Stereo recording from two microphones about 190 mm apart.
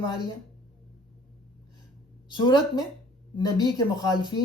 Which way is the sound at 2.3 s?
25° left (ahead or behind).